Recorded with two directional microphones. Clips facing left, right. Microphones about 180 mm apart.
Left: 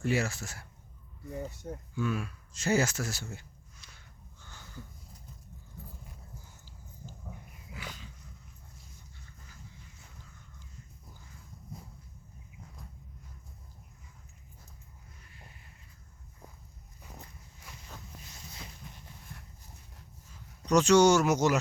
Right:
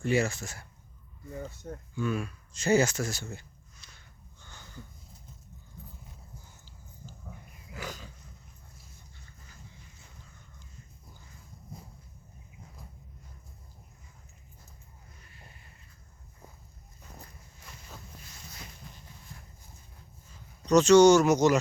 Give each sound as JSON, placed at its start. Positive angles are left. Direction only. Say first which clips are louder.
{"t": 0.0, "sound": "speech", "louder": "right 3 dB", "side_deg": 5}
{"t": 1.4, "sound": "a sound", "louder": "left 1 dB", "side_deg": 10}
{"t": 7.7, "sound": "dog", "louder": "right 5 dB", "side_deg": -45}
{"t": 17.0, "sound": "walk", "louder": "left 1 dB", "side_deg": 10}
{"t": 20.7, "sound": "speech", "louder": "right 4 dB", "side_deg": 10}